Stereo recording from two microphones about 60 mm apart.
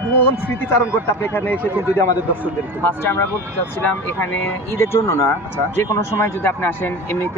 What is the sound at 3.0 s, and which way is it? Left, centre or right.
Speech, left.